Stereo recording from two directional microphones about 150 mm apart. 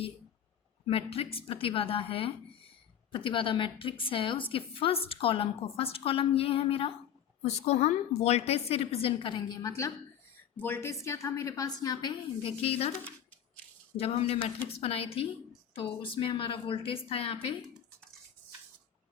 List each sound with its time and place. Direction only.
0.9 s a woman's voice: 40° left (ahead or behind)
12.4 s a woman's voice: 40° left (ahead or behind)
13.9 s a woman's voice: 40° left (ahead or behind)